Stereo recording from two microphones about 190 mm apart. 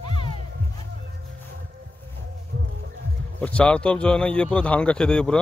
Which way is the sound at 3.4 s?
5° left (ahead or behind).